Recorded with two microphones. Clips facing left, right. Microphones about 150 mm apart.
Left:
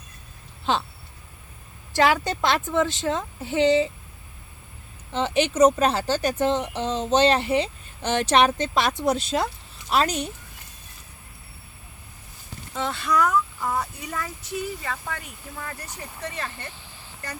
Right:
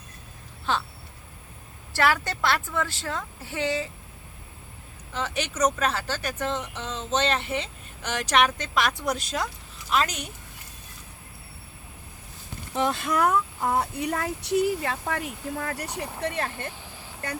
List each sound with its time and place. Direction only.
0.6 s speech: 25° left (ahead or behind)
1.9 s speech: 15° left (ahead or behind)
5.1 s speech: 30° left (ahead or behind)
12.8 s speech: 50° right (ahead or behind)
14.0 s speech: 60° right (ahead or behind)